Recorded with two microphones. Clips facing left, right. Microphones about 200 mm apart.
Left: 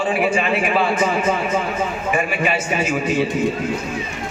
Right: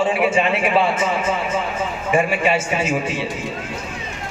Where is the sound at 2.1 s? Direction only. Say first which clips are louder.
Right 4 dB; 25° right (ahead or behind).